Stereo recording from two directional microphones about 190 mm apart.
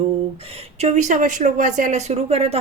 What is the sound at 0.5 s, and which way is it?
Speech, 35° right (ahead or behind).